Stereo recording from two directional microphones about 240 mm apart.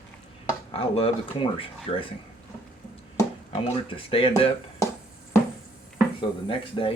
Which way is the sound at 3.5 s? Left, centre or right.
Left.